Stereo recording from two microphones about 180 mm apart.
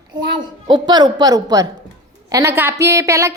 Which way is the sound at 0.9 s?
25° right (ahead or behind).